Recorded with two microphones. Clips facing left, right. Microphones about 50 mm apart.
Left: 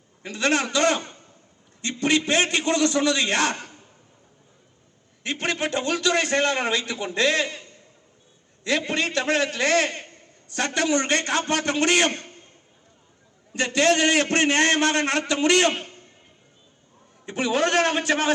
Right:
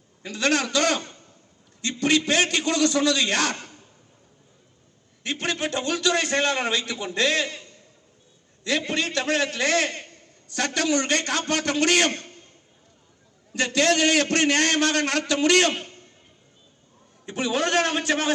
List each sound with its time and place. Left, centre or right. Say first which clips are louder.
0.3 s a man's voice: even; left
5.2 s a man's voice: left 1 dB; left
13.5 s a man's voice: left 1 dB; left
17.2 s a man's voice: left 2 dB; left